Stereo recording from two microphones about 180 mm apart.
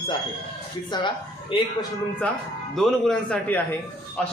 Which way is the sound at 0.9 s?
25° left (ahead or behind).